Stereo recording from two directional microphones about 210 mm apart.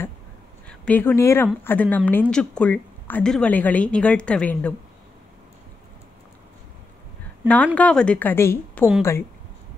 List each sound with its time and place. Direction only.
0.7 s a woman's voice: 5° left (ahead or behind)
7.4 s a woman's voice: 5° left (ahead or behind)